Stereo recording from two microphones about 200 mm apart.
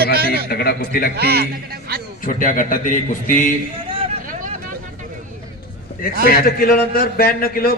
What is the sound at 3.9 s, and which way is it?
Vehicle, 25° right (ahead or behind).